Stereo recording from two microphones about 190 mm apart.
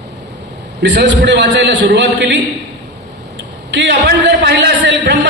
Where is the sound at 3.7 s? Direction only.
70° right (ahead or behind).